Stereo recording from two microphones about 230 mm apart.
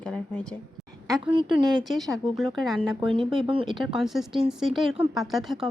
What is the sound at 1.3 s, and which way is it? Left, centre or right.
Speech, right.